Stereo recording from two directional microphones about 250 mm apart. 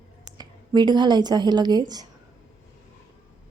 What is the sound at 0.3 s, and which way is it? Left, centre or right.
A woman's voice, centre.